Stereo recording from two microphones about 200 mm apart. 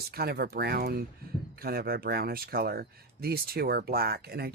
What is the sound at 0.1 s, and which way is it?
Speech, 50° right (ahead or behind).